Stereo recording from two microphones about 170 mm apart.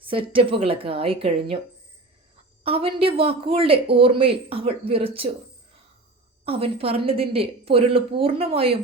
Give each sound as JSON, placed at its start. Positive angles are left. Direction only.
{"t": 0.0, "sound": "speech", "side_deg": -30}
{"t": 2.6, "sound": "speech", "side_deg": -35}
{"t": 6.4, "sound": "speech", "side_deg": -35}